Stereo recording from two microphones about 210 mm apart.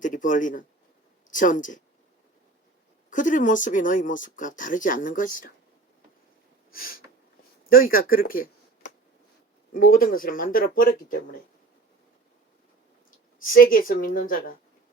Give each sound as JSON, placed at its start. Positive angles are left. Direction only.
{"t": 0.0, "sound": "a man's voice", "side_deg": 40}
{"t": 3.1, "sound": "speech", "side_deg": 40}
{"t": 6.7, "sound": "speech", "side_deg": 45}
{"t": 13.4, "sound": "speech", "side_deg": 40}